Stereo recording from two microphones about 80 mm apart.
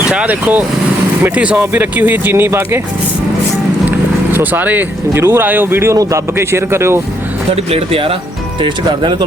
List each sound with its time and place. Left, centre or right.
0.1 s speech: centre; by 2.8 s right
4.3 s speech: right
6.0 s speech: right
6.3 s speech: right
8.6 s speech: right